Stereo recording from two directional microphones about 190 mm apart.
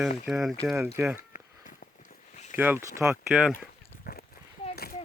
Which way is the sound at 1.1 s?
45° left (ahead or behind).